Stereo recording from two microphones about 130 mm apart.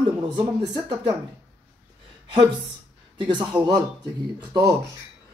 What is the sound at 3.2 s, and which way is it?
Speech, 35° right (ahead or behind).